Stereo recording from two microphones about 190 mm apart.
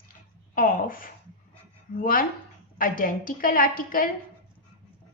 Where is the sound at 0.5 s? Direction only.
50° left (ahead or behind).